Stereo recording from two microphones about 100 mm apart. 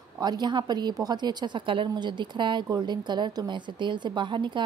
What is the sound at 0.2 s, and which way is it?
A woman's voice, 45° right (ahead or behind).